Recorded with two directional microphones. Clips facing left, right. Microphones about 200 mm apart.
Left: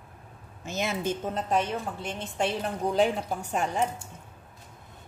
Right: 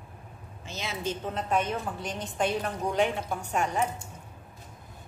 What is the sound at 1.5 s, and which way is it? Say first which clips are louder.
A woman's voice: even; 30° left (ahead or behind).